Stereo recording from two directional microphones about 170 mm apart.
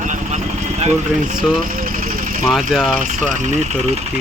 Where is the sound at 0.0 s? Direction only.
45° right (ahead or behind).